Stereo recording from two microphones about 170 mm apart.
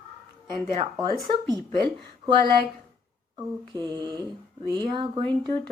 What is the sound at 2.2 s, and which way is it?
A woman's voice, 25° right (ahead or behind).